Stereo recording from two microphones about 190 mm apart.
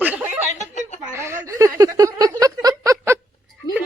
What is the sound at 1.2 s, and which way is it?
A woman's voice, 15° right (ahead or behind).